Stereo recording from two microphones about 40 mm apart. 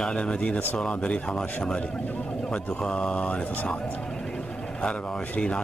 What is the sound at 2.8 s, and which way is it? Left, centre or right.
Speech, centre.